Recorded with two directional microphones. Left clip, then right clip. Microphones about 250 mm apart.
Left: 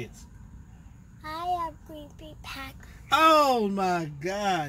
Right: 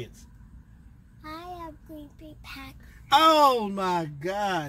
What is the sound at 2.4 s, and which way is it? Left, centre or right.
Speech, centre.